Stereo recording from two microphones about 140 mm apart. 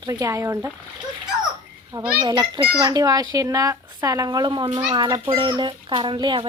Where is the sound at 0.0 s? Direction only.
25° right (ahead or behind).